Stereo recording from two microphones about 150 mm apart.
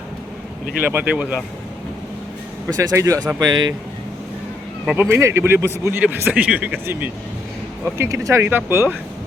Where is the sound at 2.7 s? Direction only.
20° right (ahead or behind).